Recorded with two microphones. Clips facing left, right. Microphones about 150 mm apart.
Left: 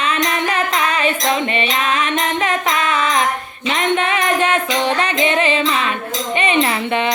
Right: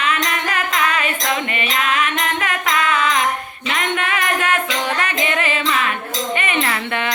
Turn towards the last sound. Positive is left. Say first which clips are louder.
# left 4 dB
turn(degrees=20)  # may be behind; listen again after turning